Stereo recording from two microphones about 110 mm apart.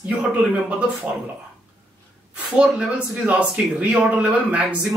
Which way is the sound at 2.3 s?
10° right (ahead or behind).